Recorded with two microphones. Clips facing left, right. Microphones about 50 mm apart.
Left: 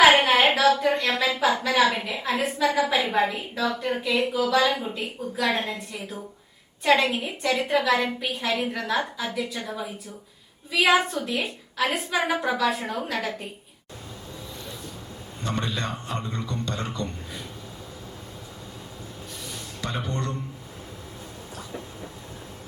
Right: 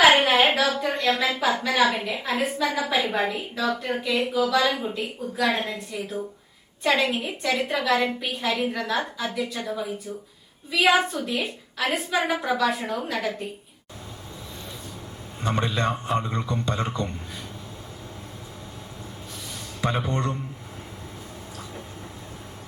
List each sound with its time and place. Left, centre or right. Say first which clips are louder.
0.0 s a woman's voice: left 1 dB; centre
15.4 s a man's voice: right 4 dB; right
19.8 s a man's voice: right 5 dB; right